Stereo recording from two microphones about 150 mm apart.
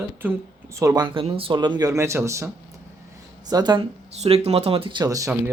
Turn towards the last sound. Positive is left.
turn(degrees=-20)  # may be behind; listen again after turning